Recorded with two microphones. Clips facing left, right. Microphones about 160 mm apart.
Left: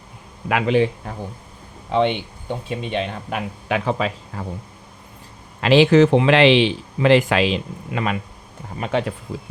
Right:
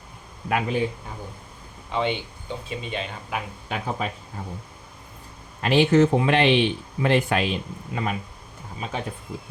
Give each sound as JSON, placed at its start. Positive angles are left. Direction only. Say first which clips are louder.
{"t": 0.4, "sound": "speech", "louder": "left 6 dB", "side_deg": 90}
{"t": 2.0, "sound": "speech", "louder": "left 6 dB", "side_deg": 60}
{"t": 5.5, "sound": "speech", "louder": "left 5 dB", "side_deg": 90}